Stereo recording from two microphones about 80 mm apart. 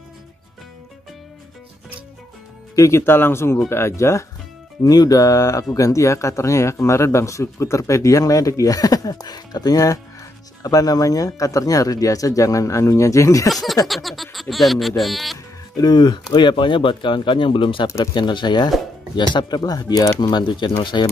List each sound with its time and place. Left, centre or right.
2.7 s speech: left
4.8 s speech: left
13.5 s speech: centre
15.8 s speech: left
17.8 s speech: left
18.1 s speech: left